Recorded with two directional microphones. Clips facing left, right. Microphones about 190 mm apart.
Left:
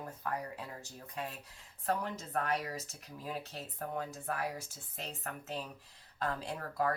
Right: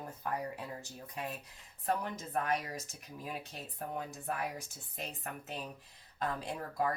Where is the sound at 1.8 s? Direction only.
15° right (ahead or behind).